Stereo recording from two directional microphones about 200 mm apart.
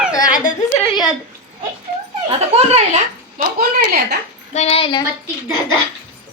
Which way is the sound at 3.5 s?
50° right (ahead or behind).